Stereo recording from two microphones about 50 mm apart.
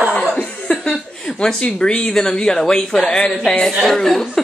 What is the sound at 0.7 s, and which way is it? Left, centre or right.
A woman's voice, centre.